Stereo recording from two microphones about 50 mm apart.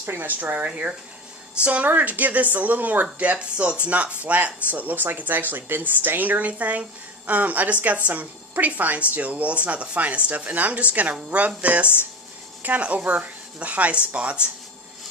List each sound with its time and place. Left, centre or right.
0.0 s speech: right
0.3 s speech: right